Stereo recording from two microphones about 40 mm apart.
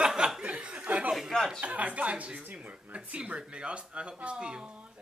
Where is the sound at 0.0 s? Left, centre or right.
Centre; by 1.1 s right.